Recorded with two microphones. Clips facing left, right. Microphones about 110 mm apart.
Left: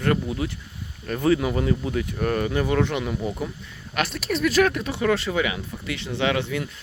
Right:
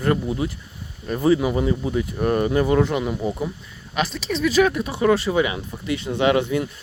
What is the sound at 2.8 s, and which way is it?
Speech, 5° right (ahead or behind).